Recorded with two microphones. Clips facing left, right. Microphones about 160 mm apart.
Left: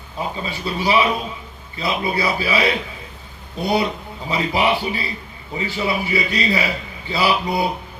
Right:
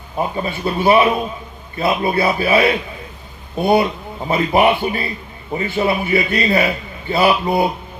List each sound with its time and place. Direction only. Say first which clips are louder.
0.2 s a man's voice: right 5 dB; 50° right (ahead or behind)